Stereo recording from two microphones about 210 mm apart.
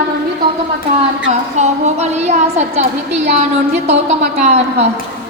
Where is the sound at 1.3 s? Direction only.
35° right (ahead or behind).